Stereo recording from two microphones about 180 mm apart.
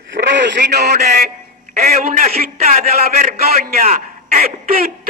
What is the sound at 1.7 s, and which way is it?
A man's voice, 55° right (ahead or behind).